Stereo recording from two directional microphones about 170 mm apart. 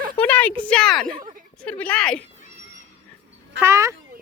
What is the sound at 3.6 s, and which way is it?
Speech, 15° right (ahead or behind).